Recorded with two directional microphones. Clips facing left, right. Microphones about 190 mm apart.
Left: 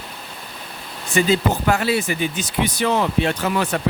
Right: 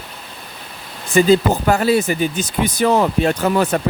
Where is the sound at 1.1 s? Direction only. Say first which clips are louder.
Right 5 dB; 40° right (ahead or behind).